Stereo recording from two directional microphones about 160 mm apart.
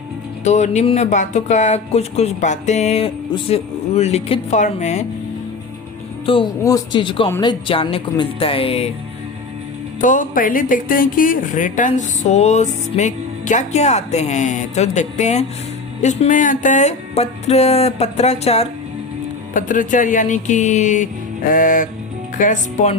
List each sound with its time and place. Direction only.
0.4 s speech: 45° left (ahead or behind)
6.2 s speech: 35° left (ahead or behind)
6.6 s a man's voice: 20° left (ahead or behind); by 8.9 s 35° left (ahead or behind)
10.0 s speech: 55° left (ahead or behind)
19.5 s speech: 55° left (ahead or behind)